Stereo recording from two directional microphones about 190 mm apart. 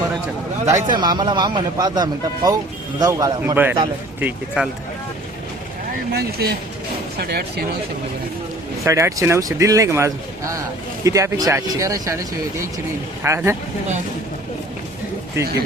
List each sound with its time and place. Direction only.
0.7 s speech: 20° right (ahead or behind); by 4.7 s 5° right (ahead or behind)
6.1 s speech: 55° right (ahead or behind)
8.8 s speech: 15° right (ahead or behind)
13.2 s speech: 15° right (ahead or behind)
15.4 s speech: 15° right (ahead or behind)